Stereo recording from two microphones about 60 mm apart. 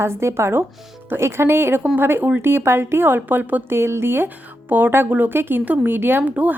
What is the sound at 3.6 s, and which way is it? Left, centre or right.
A woman's voice, right.